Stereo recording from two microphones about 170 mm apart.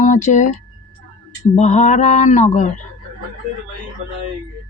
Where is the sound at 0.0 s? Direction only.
45° left (ahead or behind).